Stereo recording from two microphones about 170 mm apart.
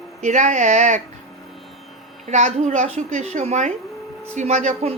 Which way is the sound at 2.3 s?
45° right (ahead or behind).